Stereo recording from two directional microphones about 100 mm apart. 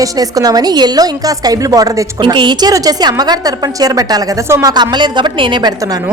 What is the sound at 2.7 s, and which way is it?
A woman's voice, 40° right (ahead or behind).